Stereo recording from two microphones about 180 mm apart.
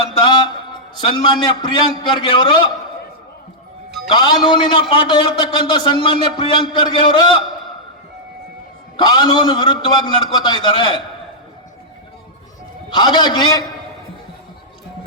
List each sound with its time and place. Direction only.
0.2 s a man's voice: 25° left (ahead or behind)
4.1 s a man's voice: 25° left (ahead or behind)
9.0 s a man's voice: 25° left (ahead or behind)
12.9 s a man's voice: 25° left (ahead or behind)